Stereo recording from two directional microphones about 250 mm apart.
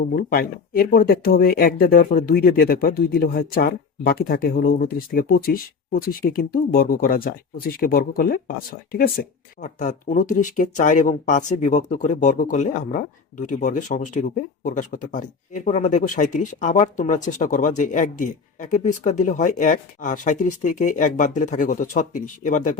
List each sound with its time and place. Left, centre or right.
0.2 s speech: left